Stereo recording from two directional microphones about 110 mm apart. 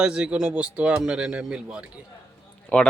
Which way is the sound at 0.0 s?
10° right (ahead or behind).